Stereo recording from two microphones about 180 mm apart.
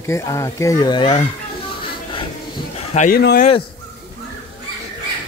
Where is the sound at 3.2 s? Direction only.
60° left (ahead or behind).